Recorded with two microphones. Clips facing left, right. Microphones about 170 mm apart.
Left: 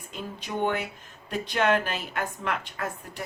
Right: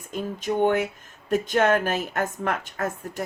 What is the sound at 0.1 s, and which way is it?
A woman's voice, 45° right (ahead or behind).